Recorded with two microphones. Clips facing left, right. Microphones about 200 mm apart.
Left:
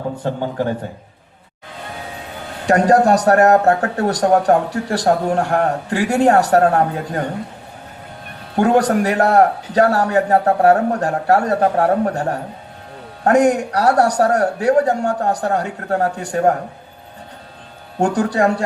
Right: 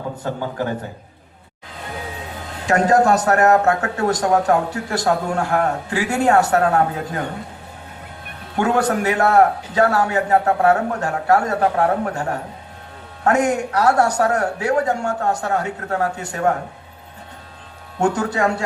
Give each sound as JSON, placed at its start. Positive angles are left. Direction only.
{"t": 2.6, "sound": "speech", "side_deg": 35}
{"t": 8.5, "sound": "speech", "side_deg": 35}
{"t": 18.0, "sound": "speech", "side_deg": 35}